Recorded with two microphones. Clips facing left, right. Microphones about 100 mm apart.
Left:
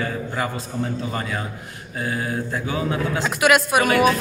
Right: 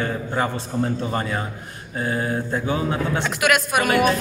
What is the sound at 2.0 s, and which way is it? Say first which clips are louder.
Speech: right 2 dB; 25° right (ahead or behind).